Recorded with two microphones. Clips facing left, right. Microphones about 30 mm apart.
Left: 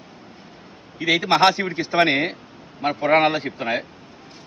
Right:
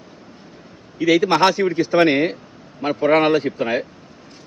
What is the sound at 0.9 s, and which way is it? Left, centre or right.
Speech, left.